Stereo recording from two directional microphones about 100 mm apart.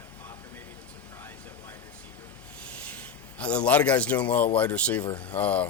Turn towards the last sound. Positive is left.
turn(degrees=15)  # may be behind; listen again after turning